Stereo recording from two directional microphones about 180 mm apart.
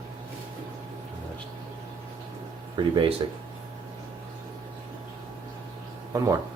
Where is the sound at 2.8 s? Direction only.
25° right (ahead or behind).